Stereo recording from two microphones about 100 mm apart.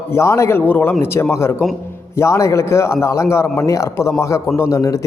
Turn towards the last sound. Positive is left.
turn(degrees=35)  # may be behind; listen again after turning